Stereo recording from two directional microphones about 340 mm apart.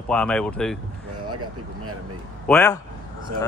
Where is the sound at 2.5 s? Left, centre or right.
Centre.